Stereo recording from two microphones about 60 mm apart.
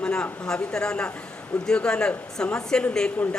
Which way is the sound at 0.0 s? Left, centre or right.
Centre.